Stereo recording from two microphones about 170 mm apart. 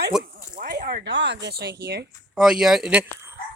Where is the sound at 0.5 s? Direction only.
60° right (ahead or behind).